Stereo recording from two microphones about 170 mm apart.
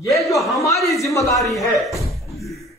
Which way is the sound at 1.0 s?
20° left (ahead or behind).